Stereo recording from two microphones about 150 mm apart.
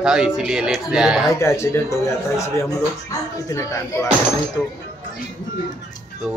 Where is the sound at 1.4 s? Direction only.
20° left (ahead or behind).